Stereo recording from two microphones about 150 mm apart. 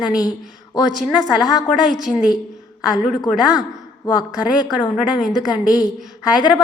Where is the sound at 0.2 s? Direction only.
25° left (ahead or behind).